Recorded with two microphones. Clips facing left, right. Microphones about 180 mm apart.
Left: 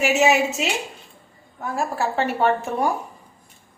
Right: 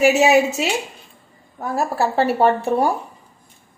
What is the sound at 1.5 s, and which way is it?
Speech, 40° right (ahead or behind).